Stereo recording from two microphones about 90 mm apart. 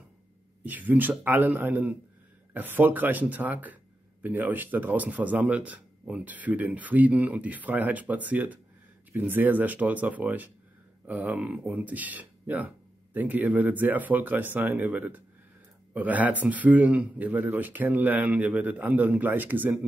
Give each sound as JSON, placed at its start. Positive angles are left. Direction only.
{"t": 0.7, "sound": "speech", "side_deg": -20}